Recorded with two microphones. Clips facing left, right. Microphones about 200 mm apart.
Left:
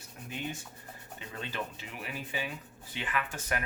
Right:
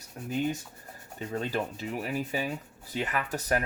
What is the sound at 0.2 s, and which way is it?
Speech, 40° right (ahead or behind).